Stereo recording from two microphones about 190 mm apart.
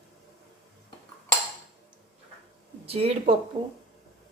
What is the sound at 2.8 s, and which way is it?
Speech, 30° right (ahead or behind).